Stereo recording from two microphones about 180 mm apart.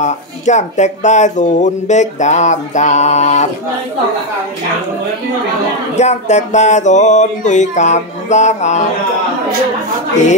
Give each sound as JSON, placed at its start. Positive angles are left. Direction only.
{"t": 0.0, "sound": "speech", "side_deg": 40}
{"t": 5.9, "sound": "speech", "side_deg": 40}